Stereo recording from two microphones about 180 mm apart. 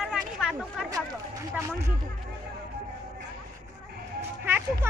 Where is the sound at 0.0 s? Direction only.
5° right (ahead or behind).